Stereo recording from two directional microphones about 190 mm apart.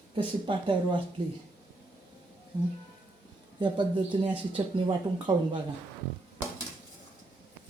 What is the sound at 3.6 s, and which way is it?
Speech, 25° right (ahead or behind).